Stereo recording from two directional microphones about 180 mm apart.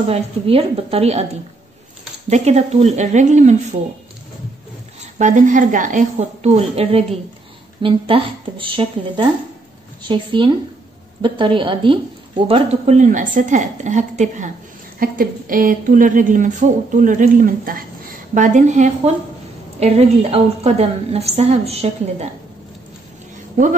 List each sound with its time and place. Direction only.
0.0 s a woman's voice: 35° right (ahead or behind)
2.2 s a woman's voice: 35° right (ahead or behind)
5.2 s a woman's voice: 45° right (ahead or behind)